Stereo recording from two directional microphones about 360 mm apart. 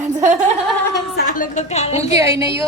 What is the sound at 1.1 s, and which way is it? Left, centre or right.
A woman's voice, left.